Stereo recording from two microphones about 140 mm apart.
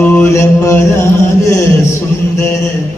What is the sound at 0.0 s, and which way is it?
Music, 15° left (ahead or behind).